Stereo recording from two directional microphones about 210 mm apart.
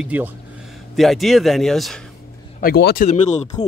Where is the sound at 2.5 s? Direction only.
45° left (ahead or behind).